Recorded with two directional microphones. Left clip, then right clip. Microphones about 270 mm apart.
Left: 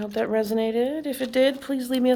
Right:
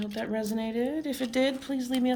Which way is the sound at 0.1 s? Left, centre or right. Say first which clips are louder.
Left 10 dB; centre.